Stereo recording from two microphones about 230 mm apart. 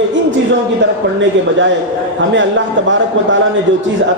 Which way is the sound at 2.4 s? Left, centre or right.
Right.